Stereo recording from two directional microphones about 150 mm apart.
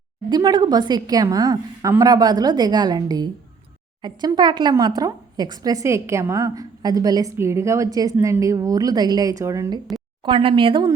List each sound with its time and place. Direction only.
0.3 s a woman's voice: 30° right (ahead or behind)
9.9 s speech: 35° right (ahead or behind)